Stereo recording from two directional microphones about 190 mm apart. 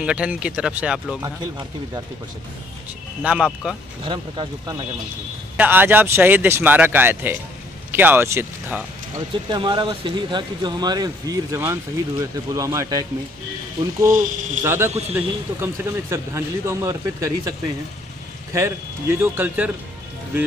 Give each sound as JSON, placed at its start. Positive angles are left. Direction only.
{"t": 0.0, "sound": "speech", "side_deg": -5}
{"t": 1.2, "sound": "speech", "side_deg": -20}
{"t": 3.2, "sound": "speech", "side_deg": -5}
{"t": 4.0, "sound": "speech", "side_deg": -25}
{"t": 5.6, "sound": "a man's voice", "side_deg": -10}
{"t": 9.5, "sound": "speech", "side_deg": -25}
{"t": 14.0, "sound": "speech", "side_deg": -45}
{"t": 14.6, "sound": "a man's voice", "side_deg": -10}